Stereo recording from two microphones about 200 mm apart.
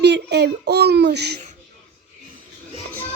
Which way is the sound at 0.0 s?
55° right (ahead or behind).